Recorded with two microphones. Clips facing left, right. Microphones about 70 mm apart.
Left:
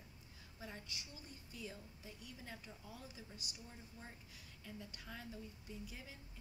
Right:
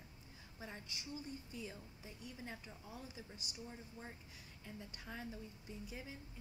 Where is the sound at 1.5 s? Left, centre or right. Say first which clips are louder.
Right 2 dB; centre.